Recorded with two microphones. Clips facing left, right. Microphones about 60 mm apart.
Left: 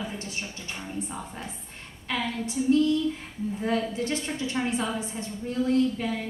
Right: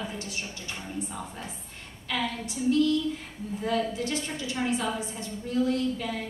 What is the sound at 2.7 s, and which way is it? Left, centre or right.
Speech, left.